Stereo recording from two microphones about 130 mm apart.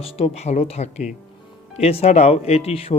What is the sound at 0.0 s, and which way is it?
Speech, 55° left (ahead or behind).